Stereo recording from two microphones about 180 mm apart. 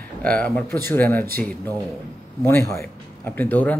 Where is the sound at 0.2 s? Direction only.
5° left (ahead or behind).